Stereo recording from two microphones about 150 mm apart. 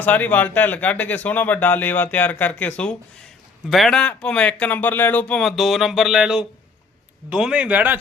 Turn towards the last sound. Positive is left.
turn(degrees=-10)  # may be behind; listen again after turning